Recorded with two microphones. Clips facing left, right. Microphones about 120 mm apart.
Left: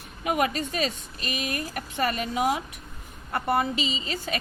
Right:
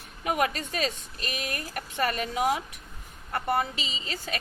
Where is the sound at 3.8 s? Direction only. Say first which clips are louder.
Left 6 dB; 35° right (ahead or behind).